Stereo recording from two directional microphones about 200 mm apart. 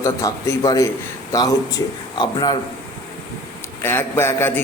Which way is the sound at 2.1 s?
20° left (ahead or behind).